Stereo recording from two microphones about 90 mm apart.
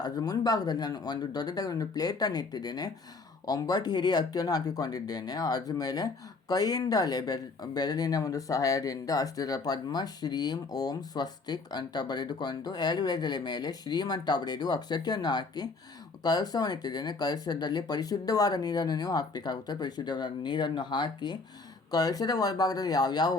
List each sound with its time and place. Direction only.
0.0 s speech: 45° left (ahead or behind)
21.9 s speech: 45° left (ahead or behind)